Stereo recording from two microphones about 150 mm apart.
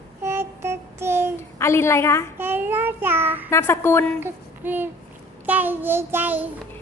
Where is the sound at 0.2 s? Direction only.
15° right (ahead or behind).